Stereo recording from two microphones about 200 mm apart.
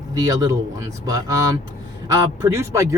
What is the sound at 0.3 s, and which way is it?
Speech, 15° right (ahead or behind).